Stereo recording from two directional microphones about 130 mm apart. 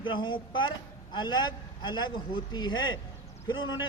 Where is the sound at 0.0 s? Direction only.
40° left (ahead or behind).